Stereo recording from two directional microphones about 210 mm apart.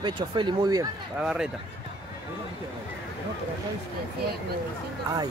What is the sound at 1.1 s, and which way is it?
Speech, 5° right (ahead or behind).